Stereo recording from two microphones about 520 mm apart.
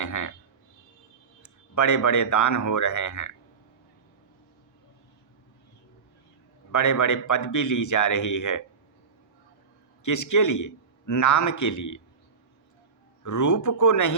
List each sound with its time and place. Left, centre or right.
0.0 s speech: left
1.4 s speech: left
6.7 s a man's voice: left
10.0 s a man's voice: left
13.2 s a man's voice: left